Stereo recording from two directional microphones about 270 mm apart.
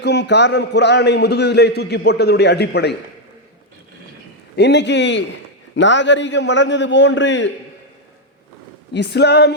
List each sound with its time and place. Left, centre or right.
0.0 s a man's voice: left
4.5 s a man's voice: left
8.9 s a man's voice: left